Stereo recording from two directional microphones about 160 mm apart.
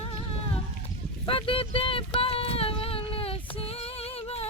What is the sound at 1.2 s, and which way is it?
Child singing, 35° left (ahead or behind).